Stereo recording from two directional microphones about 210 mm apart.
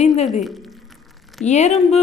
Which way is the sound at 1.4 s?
35° left (ahead or behind).